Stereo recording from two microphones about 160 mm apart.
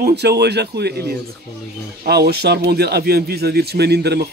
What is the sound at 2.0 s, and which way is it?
Speech, 90° right.